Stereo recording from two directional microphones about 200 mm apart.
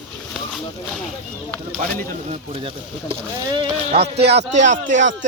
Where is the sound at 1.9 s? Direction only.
30° right (ahead or behind).